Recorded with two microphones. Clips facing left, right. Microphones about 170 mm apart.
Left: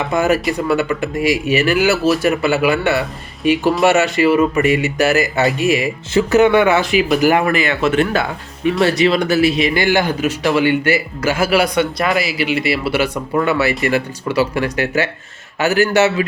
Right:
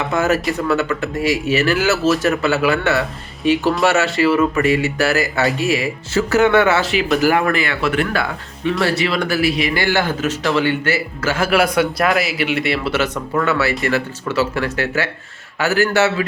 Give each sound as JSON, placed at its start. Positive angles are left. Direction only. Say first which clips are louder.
{"t": 0.1, "sound": "speech", "louder": "left 2 dB", "side_deg": 15}